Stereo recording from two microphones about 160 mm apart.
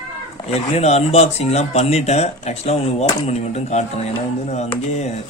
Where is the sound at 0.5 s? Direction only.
40° left (ahead or behind).